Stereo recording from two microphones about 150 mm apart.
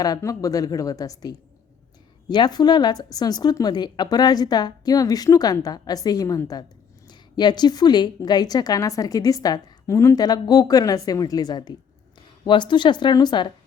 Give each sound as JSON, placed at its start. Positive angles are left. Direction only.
{"t": 0.0, "sound": "a woman's voice", "side_deg": 25}